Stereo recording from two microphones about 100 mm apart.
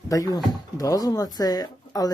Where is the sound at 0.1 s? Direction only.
40° left (ahead or behind).